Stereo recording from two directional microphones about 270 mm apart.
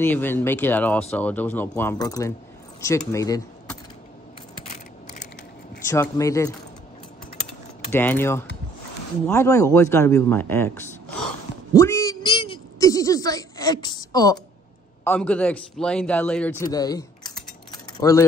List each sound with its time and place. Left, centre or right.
0.0 s speech: centre
4.6 s a sound: left
5.9 s speech: centre
7.9 s speech: centre
11.7 s a sound: centre
15.0 s a man's voice: centre